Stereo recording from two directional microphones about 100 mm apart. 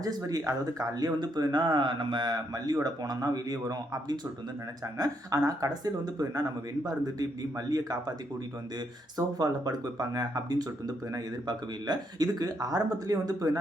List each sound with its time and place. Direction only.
0.2 s speech: 35° right (ahead or behind)
9.1 s speech: 40° right (ahead or behind)